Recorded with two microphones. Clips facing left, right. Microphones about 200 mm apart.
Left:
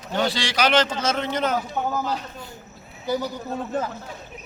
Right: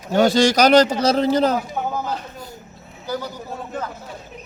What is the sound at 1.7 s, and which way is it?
Speech, 10° right (ahead or behind).